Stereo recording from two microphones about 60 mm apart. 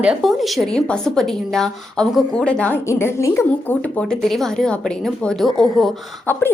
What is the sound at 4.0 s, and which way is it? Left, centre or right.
Speech, centre.